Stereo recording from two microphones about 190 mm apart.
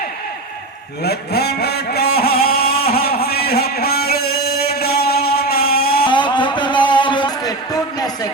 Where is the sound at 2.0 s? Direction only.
55° left (ahead or behind).